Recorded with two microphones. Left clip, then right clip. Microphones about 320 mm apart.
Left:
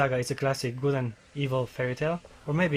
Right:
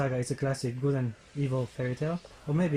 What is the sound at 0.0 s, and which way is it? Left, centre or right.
Speech, left.